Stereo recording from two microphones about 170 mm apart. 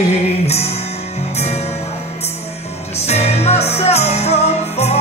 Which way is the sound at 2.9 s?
40° left (ahead or behind).